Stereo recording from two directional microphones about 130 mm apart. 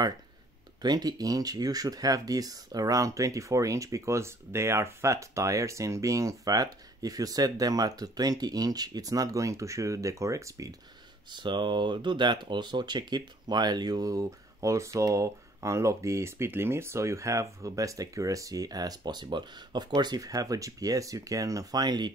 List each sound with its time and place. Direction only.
0.8 s speech: 30° right (ahead or behind)
11.2 s speech: 35° right (ahead or behind)